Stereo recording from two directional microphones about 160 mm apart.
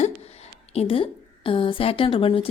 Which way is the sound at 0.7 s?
35° left (ahead or behind).